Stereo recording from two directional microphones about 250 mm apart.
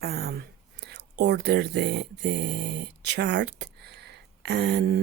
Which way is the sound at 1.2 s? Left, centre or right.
Right.